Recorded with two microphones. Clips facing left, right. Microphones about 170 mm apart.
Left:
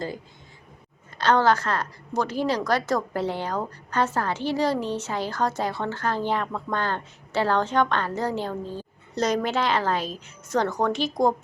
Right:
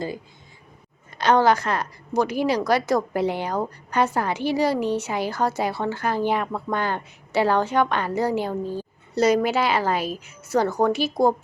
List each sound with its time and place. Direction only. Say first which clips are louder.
1.2 s a woman's voice: right 2 dB; 15° right (ahead or behind)